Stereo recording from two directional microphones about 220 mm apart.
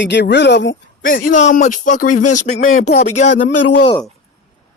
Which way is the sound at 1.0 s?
40° left (ahead or behind).